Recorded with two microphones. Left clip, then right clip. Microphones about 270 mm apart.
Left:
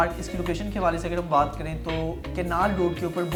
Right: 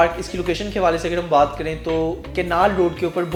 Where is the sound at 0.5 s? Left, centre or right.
Left.